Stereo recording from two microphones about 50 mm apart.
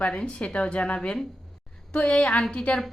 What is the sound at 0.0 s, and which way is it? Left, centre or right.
A woman's voice, left.